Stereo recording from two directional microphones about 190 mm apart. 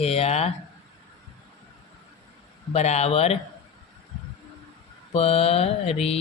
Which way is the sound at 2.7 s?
35° left (ahead or behind).